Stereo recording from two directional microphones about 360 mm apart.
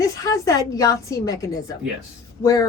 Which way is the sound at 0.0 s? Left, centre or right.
Centre.